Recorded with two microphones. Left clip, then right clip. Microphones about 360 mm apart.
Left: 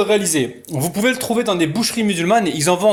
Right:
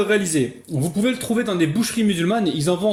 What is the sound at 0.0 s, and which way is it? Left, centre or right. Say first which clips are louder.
Speech: left 3 dB; centre.